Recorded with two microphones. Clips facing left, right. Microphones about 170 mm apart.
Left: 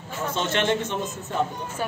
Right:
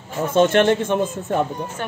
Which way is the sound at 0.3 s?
50° right (ahead or behind).